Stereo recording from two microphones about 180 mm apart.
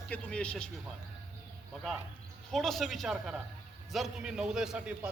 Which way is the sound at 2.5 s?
Centre (ahead or behind).